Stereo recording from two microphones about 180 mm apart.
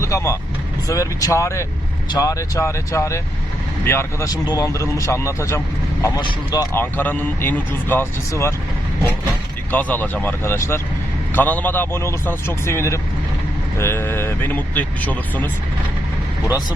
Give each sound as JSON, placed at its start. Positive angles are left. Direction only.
{"t": 0.0, "sound": "speech", "side_deg": 15}
{"t": 9.7, "sound": "speech", "side_deg": 10}